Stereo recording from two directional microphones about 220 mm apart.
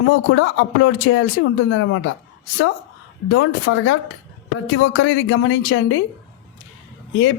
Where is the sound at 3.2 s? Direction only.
60° left (ahead or behind).